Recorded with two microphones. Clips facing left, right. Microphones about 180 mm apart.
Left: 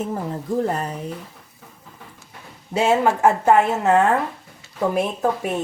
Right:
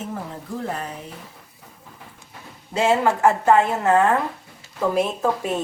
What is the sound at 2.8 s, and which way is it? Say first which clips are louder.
A woman's voice: left 1 dB; 20° left (ahead or behind).